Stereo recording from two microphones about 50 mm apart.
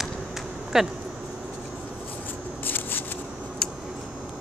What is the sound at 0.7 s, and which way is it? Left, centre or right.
Speech, centre.